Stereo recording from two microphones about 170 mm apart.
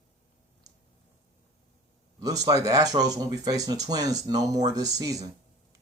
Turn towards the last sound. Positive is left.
turn(degrees=-20)  # may be behind; listen again after turning